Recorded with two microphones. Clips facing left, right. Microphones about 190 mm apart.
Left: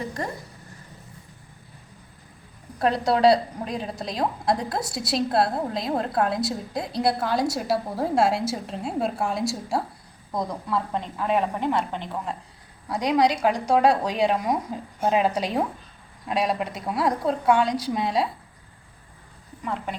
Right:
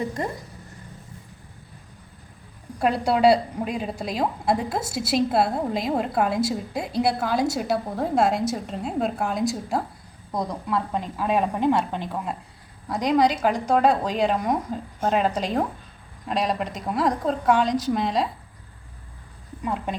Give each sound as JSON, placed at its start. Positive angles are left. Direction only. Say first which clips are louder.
{"t": 2.7, "sound": "a woman's voice", "louder": "even", "side_deg": -5}
{"t": 12.9, "sound": "a woman's voice", "louder": "right 1 dB", "side_deg": 0}
{"t": 19.6, "sound": "a woman's voice", "louder": "right 2 dB", "side_deg": -15}